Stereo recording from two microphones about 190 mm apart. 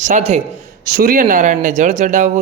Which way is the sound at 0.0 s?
35° right (ahead or behind).